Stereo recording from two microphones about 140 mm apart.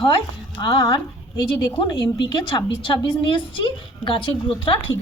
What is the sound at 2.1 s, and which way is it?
A woman's voice, 35° left (ahead or behind).